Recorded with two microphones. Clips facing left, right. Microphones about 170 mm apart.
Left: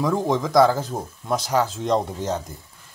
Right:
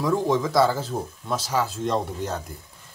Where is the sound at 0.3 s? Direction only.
15° left (ahead or behind).